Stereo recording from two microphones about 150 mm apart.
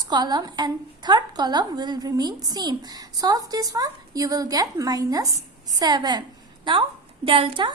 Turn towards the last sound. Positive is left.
turn(degrees=-35)  # may be behind; listen again after turning